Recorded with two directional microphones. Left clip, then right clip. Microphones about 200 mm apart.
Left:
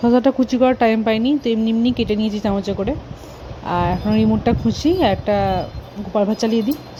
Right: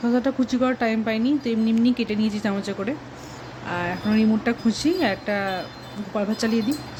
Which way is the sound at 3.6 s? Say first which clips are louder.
Left 7 dB; 35° left (ahead or behind).